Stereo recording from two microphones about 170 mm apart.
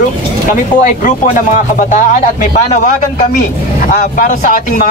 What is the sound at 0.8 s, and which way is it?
Speech, 50° left (ahead or behind).